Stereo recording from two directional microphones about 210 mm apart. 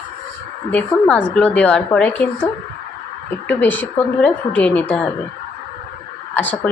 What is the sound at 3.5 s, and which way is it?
A woman's voice, 10° left (ahead or behind).